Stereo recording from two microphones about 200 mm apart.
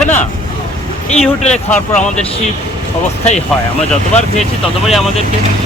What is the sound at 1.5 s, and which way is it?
Speech, 5° left (ahead or behind).